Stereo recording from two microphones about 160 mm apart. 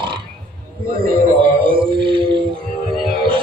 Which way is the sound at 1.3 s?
35° right (ahead or behind).